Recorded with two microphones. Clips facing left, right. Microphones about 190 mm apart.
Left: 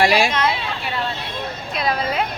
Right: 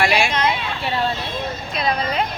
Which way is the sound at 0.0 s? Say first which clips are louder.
Left 2 dB; 40° left (ahead or behind).